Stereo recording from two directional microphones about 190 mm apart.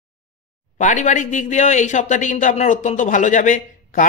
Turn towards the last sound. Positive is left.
turn(degrees=45)  # may be behind; listen again after turning